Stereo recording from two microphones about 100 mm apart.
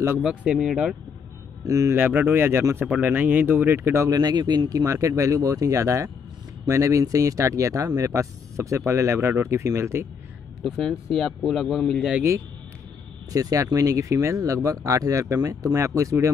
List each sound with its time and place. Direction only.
0.2 s speech: 10° right (ahead or behind)
1.6 s speech: 35° right (ahead or behind)
2.0 s speech: 20° right (ahead or behind)
4.2 s speech: 45° right (ahead or behind); by 10.0 s 25° right (ahead or behind)
10.6 s speech: centre (ahead or behind)
13.3 s speech: 35° right (ahead or behind)